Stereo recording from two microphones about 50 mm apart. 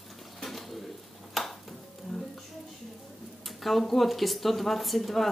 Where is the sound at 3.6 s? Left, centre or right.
Centre.